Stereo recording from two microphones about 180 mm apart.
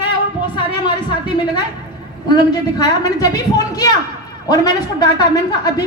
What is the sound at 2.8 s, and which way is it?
A woman's voice, 20° left (ahead or behind).